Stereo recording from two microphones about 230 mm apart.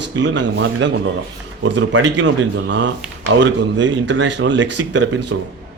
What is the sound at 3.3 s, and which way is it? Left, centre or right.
Speech, right.